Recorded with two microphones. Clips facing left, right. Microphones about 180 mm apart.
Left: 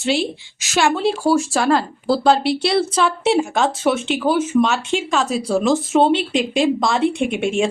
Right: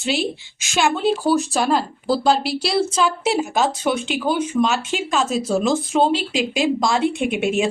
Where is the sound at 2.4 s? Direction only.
25° left (ahead or behind).